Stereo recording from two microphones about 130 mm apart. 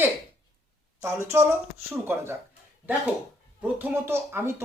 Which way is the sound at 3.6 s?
15° right (ahead or behind).